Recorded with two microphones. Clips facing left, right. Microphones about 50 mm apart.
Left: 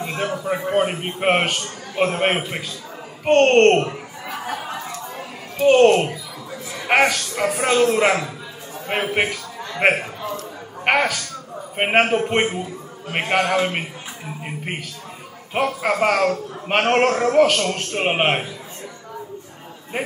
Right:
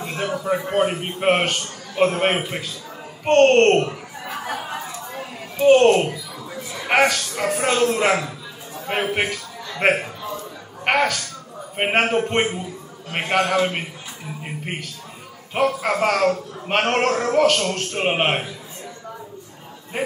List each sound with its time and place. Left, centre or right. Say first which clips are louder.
0.0 s a sound: left 1 dB; centre
0.7 s a man's voice: even; centre
4.5 s chatter: left 1 dB; centre
5.7 s a man's voice: even; centre
14.4 s a sound: left 1 dB; centre
15.5 s a man's voice: even; centre